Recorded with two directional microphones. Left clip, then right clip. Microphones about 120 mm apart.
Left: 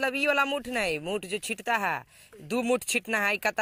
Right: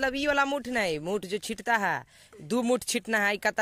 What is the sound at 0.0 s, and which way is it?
Speech, 50° right (ahead or behind).